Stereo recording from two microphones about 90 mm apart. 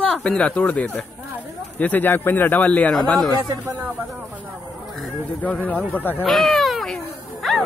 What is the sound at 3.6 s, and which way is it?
Speech, 20° right (ahead or behind).